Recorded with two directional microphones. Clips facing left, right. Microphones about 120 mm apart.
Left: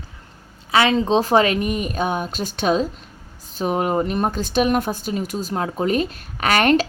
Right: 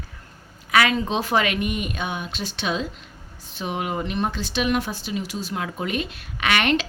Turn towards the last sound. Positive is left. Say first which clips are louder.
# left 5 dB
turn(degrees=40)  # may be behind; listen again after turning